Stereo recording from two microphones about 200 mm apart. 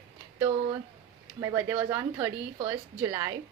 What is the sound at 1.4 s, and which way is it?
A woman's voice, 15° right (ahead or behind).